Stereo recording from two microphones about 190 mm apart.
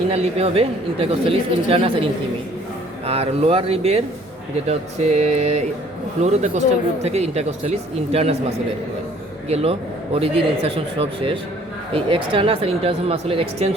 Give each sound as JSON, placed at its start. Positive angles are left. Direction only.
{"t": 0.1, "sound": "speech", "side_deg": -30}
{"t": 3.1, "sound": "speech", "side_deg": -30}